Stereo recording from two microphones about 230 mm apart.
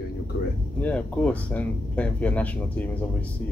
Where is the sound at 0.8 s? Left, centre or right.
Centre.